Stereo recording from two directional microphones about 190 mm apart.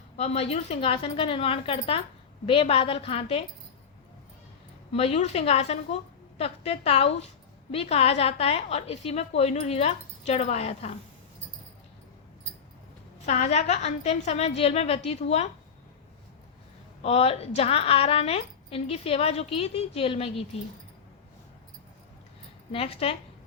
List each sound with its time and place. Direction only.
0.2 s a woman's voice: 35° left (ahead or behind)
4.9 s a woman's voice: 35° left (ahead or behind)
13.2 s a woman's voice: 35° left (ahead or behind)
17.0 s a woman's voice: 35° left (ahead or behind)
22.7 s a woman's voice: 30° left (ahead or behind)